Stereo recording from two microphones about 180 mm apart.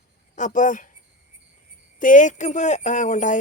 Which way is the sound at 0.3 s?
45° left (ahead or behind).